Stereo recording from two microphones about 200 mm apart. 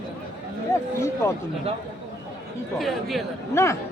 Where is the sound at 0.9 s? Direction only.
15° left (ahead or behind).